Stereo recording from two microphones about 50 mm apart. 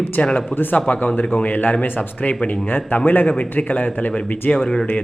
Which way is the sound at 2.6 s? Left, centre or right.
Left.